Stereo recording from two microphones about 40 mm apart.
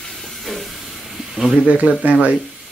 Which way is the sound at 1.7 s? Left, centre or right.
Right.